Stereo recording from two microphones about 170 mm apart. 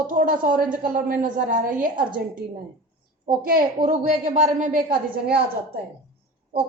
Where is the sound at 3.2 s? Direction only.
55° right (ahead or behind).